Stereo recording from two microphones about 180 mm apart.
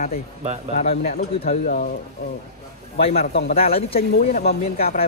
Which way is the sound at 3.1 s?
55° left (ahead or behind).